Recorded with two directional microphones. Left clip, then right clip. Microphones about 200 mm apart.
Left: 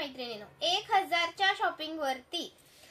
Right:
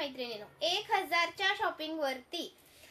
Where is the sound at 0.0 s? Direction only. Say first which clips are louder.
Even; 10° right (ahead or behind).